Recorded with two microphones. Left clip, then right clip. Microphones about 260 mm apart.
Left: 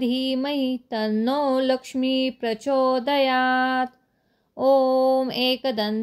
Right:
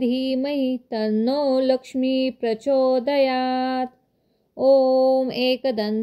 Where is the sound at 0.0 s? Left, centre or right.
Centre.